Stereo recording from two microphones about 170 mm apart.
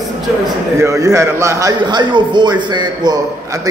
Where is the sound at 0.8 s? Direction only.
20° right (ahead or behind).